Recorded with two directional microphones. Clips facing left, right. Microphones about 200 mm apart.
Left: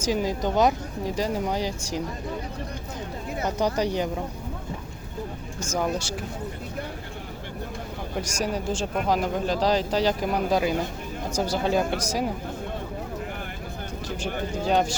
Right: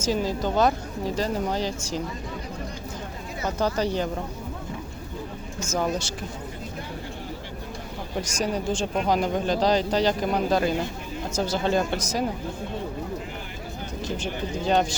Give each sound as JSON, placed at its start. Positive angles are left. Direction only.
{"t": 0.0, "sound": "speech", "side_deg": 15}
{"t": 3.4, "sound": "speech", "side_deg": 15}
{"t": 5.7, "sound": "speech", "side_deg": 10}
{"t": 8.2, "sound": "speech", "side_deg": 10}
{"t": 14.7, "sound": "speech", "side_deg": 5}